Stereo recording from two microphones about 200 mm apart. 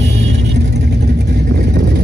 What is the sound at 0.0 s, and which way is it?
Vehicle, 35° right (ahead or behind).